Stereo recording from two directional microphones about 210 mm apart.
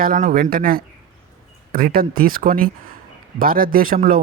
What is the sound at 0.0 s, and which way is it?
A man's voice, 40° right (ahead or behind).